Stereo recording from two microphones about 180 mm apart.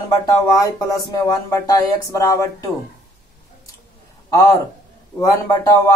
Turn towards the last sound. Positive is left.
turn(degrees=20)  # may be behind; listen again after turning